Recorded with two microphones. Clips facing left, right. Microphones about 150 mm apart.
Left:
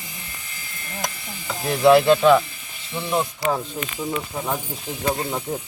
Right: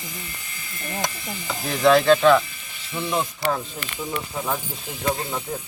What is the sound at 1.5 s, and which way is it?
Speech, 10° left (ahead or behind).